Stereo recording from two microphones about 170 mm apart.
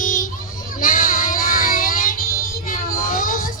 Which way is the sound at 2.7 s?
55° left (ahead or behind).